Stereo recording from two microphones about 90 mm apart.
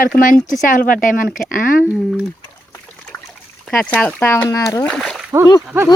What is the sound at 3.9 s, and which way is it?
Speech, 15° left (ahead or behind).